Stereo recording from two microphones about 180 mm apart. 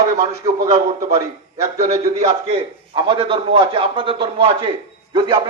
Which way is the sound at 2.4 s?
30° right (ahead or behind).